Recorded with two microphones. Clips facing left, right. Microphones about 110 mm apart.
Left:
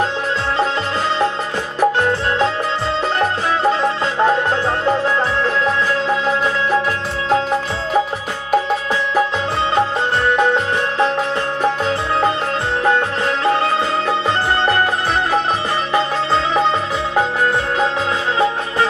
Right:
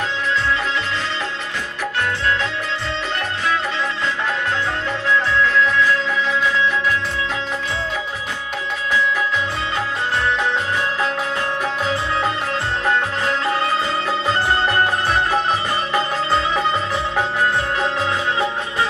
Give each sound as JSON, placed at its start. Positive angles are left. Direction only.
{"t": 1.8, "sound": "music", "side_deg": 35}
{"t": 15.9, "sound": "music", "side_deg": 20}